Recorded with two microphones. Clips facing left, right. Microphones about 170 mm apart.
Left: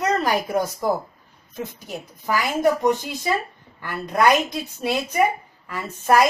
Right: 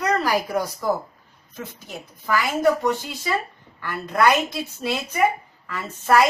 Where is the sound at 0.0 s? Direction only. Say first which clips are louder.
Even; 20° left (ahead or behind).